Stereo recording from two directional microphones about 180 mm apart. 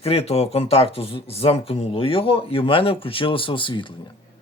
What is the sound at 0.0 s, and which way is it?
Speech, 35° left (ahead or behind).